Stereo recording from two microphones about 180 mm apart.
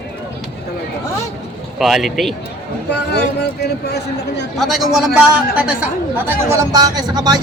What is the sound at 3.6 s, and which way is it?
Speech, 65° left (ahead or behind).